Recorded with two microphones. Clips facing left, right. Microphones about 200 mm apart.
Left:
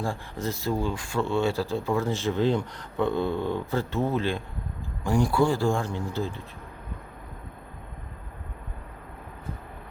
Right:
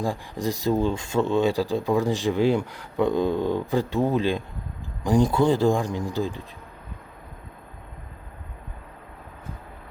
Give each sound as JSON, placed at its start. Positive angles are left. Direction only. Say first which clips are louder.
{"t": 0.0, "sound": "speech", "louder": "right 4 dB", "side_deg": -15}